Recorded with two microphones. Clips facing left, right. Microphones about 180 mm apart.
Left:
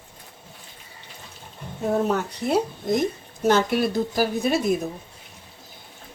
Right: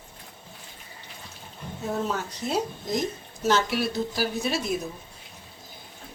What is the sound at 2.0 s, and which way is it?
A woman's voice, 60° left (ahead or behind).